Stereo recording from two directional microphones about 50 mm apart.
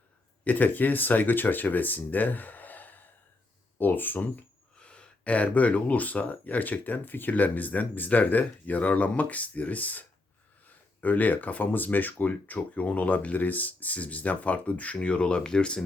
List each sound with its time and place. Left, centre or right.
0.4 s speech: left
4.8 s speech: left